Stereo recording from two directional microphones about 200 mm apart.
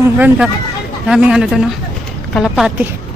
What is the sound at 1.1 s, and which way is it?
Speech, 5° right (ahead or behind).